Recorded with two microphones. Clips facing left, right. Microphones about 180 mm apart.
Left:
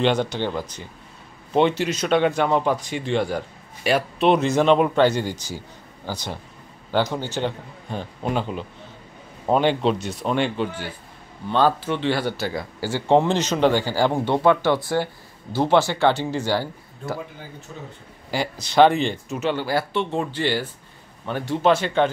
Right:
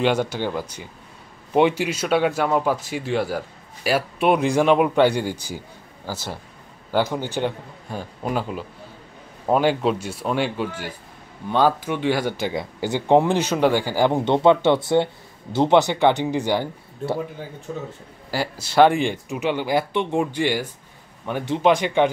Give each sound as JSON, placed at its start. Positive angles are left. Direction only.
{"t": 0.0, "sound": "speech", "side_deg": -10}
{"t": 17.7, "sound": "a man's voice", "side_deg": -50}
{"t": 18.3, "sound": "speech", "side_deg": -5}